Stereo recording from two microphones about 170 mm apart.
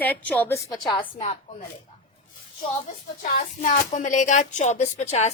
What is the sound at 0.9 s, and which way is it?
Speech, 30° left (ahead or behind).